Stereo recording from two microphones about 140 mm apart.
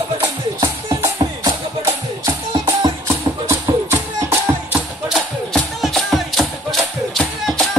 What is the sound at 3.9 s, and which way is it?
Music, 15° right (ahead or behind).